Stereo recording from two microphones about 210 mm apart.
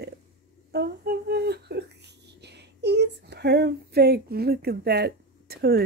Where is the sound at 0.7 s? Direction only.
50° right (ahead or behind).